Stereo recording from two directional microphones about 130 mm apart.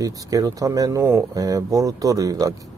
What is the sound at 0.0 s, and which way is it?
Speech, 25° right (ahead or behind).